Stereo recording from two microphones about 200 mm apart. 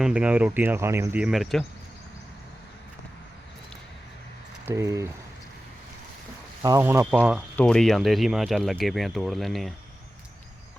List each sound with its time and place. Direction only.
0.0 s speech: 5° right (ahead or behind)
4.7 s speech: 15° right (ahead or behind)
6.6 s speech: 15° right (ahead or behind)
7.5 s speech: 5° left (ahead or behind)